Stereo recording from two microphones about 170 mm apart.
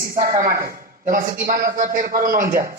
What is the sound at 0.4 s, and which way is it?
Speech, 20° right (ahead or behind).